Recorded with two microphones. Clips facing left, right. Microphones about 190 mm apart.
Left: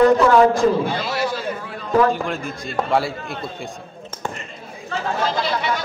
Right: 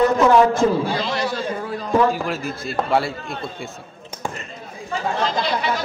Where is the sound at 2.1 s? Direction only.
5° right (ahead or behind).